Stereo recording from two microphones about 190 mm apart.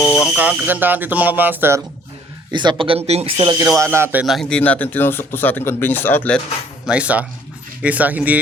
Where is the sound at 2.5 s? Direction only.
25° right (ahead or behind).